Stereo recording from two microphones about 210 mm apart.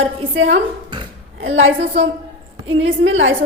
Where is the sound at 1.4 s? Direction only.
60° right (ahead or behind).